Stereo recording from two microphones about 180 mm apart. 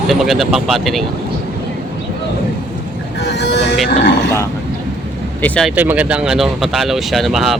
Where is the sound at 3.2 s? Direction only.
70° left (ahead or behind).